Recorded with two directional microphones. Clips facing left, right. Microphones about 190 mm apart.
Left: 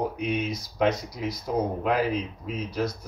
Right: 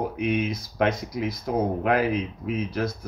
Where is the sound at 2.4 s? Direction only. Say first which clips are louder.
Right 2 dB; 55° right (ahead or behind).